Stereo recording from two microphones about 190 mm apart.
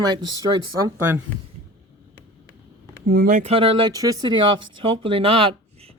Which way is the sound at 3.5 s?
25° right (ahead or behind).